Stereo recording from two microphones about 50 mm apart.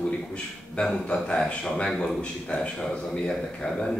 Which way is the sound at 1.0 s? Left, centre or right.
Centre.